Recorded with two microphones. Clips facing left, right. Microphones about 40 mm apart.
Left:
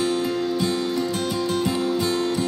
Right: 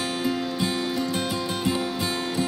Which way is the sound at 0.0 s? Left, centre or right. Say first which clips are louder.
Left 4 dB; centre.